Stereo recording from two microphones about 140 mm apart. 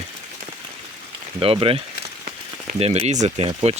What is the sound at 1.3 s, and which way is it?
Speech, 40° right (ahead or behind).